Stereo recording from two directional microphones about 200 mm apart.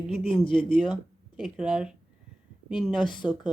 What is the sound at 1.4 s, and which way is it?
A woman's voice, 5° right (ahead or behind).